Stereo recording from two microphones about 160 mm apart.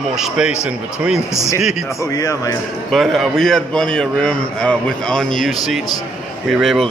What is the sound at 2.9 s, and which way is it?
A man's voice, centre (ahead or behind).